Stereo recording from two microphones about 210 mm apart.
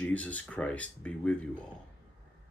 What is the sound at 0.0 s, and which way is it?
Speech, 5° left (ahead or behind).